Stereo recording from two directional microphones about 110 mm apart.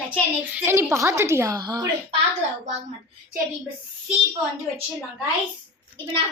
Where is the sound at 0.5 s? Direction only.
20° right (ahead or behind).